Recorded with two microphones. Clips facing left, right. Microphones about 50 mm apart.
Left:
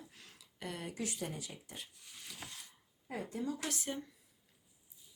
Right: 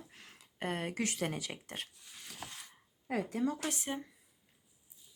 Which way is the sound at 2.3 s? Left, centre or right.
Right.